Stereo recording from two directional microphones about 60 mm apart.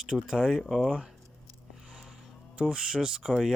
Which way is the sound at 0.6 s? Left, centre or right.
Centre.